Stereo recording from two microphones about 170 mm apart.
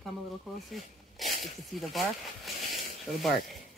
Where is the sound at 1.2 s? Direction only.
Centre (ahead or behind).